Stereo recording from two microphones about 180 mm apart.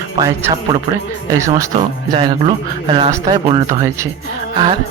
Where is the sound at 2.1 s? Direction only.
30° right (ahead or behind).